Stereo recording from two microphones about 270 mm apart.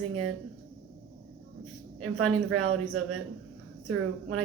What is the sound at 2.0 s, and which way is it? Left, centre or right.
Speech, right.